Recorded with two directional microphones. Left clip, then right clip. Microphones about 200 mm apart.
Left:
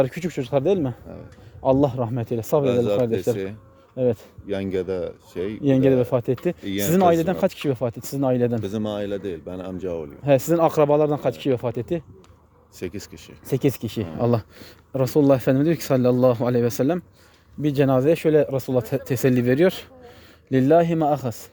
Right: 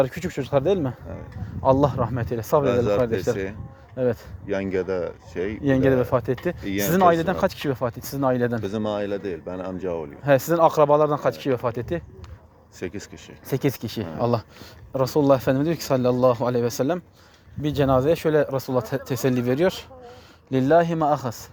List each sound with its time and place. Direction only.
0.0 s speech: 45° left (ahead or behind)
2.6 s speech: 20° left (ahead or behind)
3.3 s speech: 45° left (ahead or behind)
4.4 s speech: 25° left (ahead or behind)
5.6 s speech: 45° left (ahead or behind)
8.6 s speech: 30° left (ahead or behind)
10.2 s speech: 45° left (ahead or behind)
12.8 s speech: 30° left (ahead or behind)
13.5 s speech: 45° left (ahead or behind)